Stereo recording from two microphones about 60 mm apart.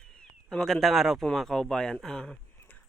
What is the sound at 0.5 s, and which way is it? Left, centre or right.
A man's voice, centre.